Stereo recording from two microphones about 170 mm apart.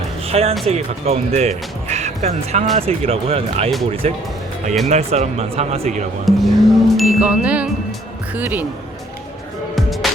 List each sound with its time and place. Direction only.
0.3 s speech: 35° right (ahead or behind)
6.2 s music: centre (ahead or behind)
8.3 s speech: 10° right (ahead or behind)
9.7 s music: centre (ahead or behind)